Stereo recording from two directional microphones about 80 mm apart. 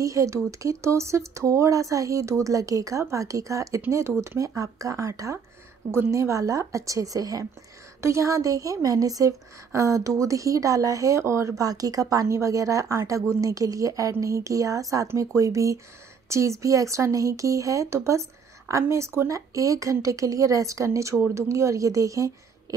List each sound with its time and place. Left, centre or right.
0.0 s a woman's voice: right